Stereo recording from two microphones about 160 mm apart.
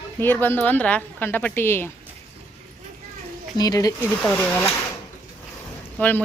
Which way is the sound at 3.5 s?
25° left (ahead or behind).